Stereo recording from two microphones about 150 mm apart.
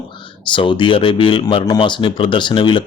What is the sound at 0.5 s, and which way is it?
Speech, 35° left (ahead or behind).